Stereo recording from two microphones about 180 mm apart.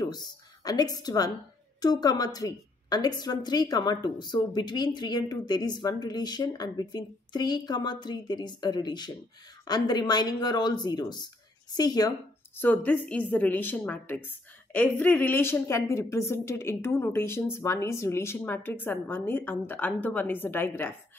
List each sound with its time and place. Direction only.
0.7 s a woman's voice: 20° left (ahead or behind)
12.5 s a woman's voice: 10° left (ahead or behind)